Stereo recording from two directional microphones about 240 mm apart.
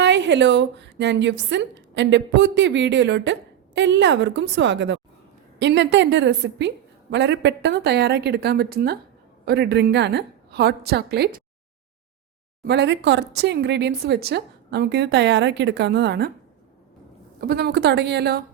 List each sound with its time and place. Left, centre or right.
0.0 s a woman's voice: right
12.6 s a woman's voice: right
17.4 s a woman's voice: right